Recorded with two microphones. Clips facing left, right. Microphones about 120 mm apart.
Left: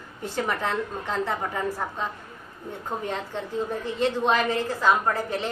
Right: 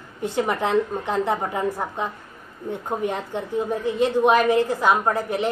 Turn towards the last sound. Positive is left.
turn(degrees=-15)  # may be behind; listen again after turning